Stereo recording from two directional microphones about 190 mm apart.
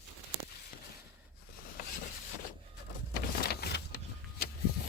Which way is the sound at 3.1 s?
55° left (ahead or behind).